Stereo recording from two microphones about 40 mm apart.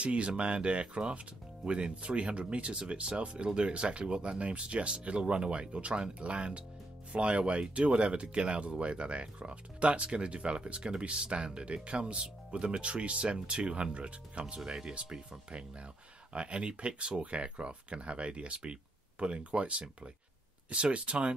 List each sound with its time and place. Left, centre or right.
0.0 s speech: right
14.7 s speech: centre